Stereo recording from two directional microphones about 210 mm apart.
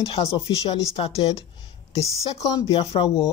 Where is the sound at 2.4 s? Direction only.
15° left (ahead or behind).